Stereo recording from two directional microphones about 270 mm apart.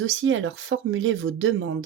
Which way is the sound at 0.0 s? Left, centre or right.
Right.